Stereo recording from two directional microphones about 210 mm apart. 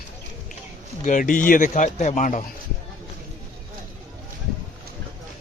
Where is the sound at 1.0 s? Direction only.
40° left (ahead or behind).